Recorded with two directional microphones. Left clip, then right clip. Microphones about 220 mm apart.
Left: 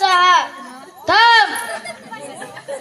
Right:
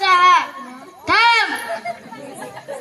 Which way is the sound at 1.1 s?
35° left (ahead or behind).